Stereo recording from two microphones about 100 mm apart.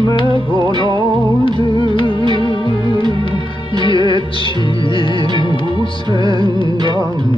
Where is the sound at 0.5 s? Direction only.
45° right (ahead or behind).